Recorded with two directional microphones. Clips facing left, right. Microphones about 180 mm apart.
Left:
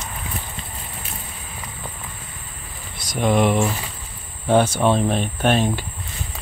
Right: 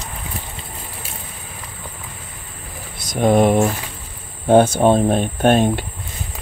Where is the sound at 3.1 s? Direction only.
45° right (ahead or behind).